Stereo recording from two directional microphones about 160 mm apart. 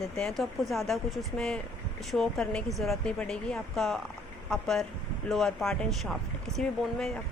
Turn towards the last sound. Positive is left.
turn(degrees=0)  # may be behind; listen again after turning